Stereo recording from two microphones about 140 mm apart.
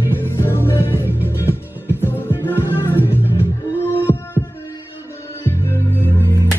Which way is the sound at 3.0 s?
15° left (ahead or behind).